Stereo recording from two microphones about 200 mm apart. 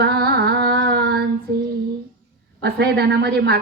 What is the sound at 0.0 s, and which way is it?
Carnatic music, 55° right (ahead or behind).